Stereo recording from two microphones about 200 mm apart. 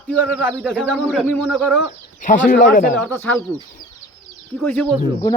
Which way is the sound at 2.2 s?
40° left (ahead or behind).